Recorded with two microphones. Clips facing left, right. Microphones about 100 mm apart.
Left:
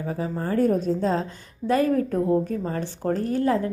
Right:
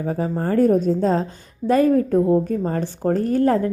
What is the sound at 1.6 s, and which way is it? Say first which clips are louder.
A woman's voice: right 5 dB; 30° right (ahead or behind).